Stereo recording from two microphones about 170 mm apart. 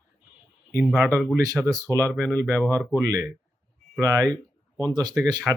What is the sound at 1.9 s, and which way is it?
Speech, 10° left (ahead or behind).